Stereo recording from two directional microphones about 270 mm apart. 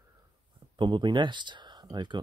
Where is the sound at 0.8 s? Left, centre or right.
Centre.